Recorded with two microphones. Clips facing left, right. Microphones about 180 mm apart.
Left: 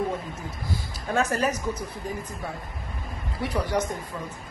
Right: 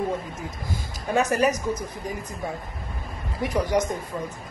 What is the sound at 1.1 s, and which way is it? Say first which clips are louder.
Speech: right 3 dB; 15° right (ahead or behind).